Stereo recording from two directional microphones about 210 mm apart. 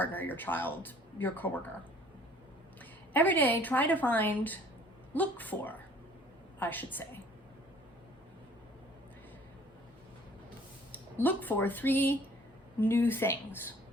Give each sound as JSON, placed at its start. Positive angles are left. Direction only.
{"t": 0.0, "sound": "speech", "side_deg": 10}
{"t": 3.1, "sound": "speech", "side_deg": 10}
{"t": 10.9, "sound": "speech", "side_deg": 10}